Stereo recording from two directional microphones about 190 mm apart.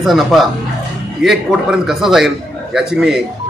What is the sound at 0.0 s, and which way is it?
A man's voice, centre (ahead or behind).